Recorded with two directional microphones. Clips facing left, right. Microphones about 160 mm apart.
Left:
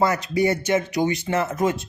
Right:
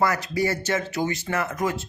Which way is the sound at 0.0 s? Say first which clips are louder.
Left 3 dB; 20° left (ahead or behind).